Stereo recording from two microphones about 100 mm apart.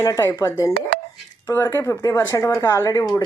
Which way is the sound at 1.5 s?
25° left (ahead or behind).